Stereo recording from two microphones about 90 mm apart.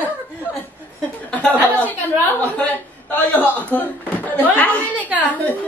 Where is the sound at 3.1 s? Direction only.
20° left (ahead or behind).